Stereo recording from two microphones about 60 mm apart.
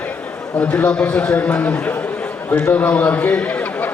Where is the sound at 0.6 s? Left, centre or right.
Left.